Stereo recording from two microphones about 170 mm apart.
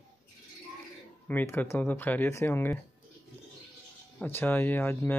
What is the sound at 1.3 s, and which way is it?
Speech, 10° left (ahead or behind).